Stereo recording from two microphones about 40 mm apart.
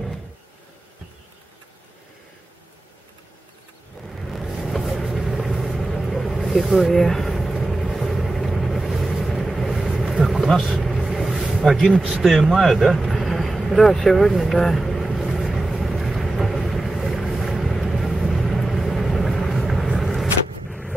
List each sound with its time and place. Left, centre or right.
4.1 s vehicle: centre
7.6 s boat: centre
9.8 s vehicle: centre
11.5 s a man's voice: centre
11.9 s a man's voice: right
12.2 s speech: centre
13.2 s vehicle: centre
13.7 s speech: centre
14.7 s vehicle: centre